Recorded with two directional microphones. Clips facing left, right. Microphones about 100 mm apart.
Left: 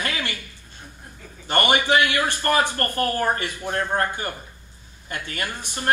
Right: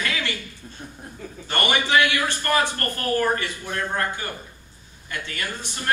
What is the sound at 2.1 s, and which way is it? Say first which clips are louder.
A man's voice: left 1 dB; 45° left (ahead or behind).